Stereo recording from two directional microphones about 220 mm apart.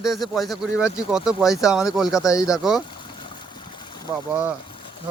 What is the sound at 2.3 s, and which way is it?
Speech, 15° left (ahead or behind).